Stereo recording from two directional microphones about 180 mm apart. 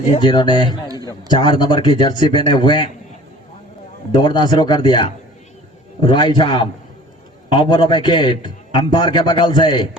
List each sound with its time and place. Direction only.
0.1 s a man's voice: 25° left (ahead or behind)
4.2 s a man's voice: 25° left (ahead or behind)